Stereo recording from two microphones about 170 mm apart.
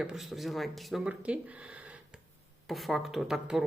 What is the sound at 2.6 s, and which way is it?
A woman's voice, centre (ahead or behind).